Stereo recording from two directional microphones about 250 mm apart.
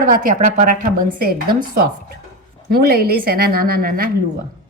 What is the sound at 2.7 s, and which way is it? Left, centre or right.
A woman's voice, right.